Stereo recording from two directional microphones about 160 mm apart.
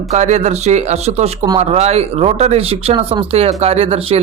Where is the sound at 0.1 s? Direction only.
45° right (ahead or behind).